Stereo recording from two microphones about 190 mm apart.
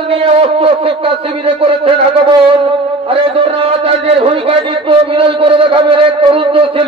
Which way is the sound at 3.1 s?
30° right (ahead or behind).